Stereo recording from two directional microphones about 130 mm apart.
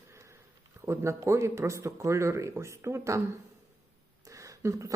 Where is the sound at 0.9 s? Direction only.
20° right (ahead or behind).